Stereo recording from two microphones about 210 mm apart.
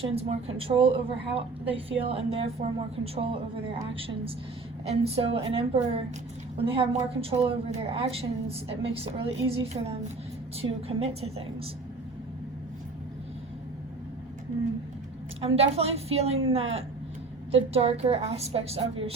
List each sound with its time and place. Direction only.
0.0 s a woman's voice: 30° right (ahead or behind)
4.9 s a woman's voice: 30° right (ahead or behind)
15.4 s a woman's voice: 30° right (ahead or behind)